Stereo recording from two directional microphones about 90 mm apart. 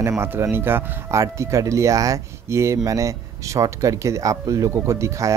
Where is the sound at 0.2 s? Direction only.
25° right (ahead or behind).